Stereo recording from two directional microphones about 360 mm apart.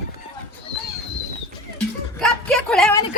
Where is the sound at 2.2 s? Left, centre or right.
Centre.